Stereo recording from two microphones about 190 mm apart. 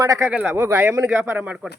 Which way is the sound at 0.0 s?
20° right (ahead or behind).